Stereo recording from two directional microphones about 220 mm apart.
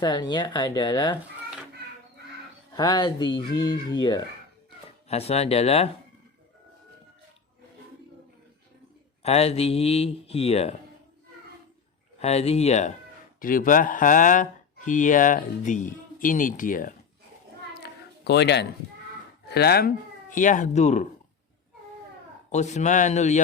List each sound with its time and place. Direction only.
0.0 s speech: 20° left (ahead or behind)
2.7 s speech: 20° left (ahead or behind)
9.2 s speech: 30° left (ahead or behind)
12.2 s speech: 30° left (ahead or behind)
17.8 s a sound: 50° left (ahead or behind)
19.5 s speech: 45° left (ahead or behind); by 21.1 s 30° left (ahead or behind)
22.5 s speech: 30° left (ahead or behind)